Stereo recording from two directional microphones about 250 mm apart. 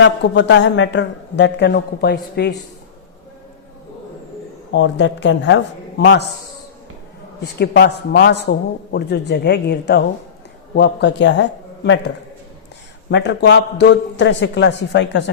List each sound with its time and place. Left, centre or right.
0.0 s a man's voice: left
4.7 s a man's voice: left
7.6 s a man's voice: left